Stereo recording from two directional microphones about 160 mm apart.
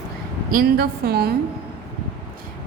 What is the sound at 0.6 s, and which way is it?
Speech, 75° right (ahead or behind).